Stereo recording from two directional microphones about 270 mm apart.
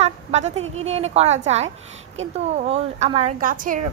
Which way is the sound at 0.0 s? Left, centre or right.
Right.